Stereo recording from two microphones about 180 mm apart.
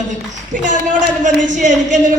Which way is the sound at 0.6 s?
45° right (ahead or behind).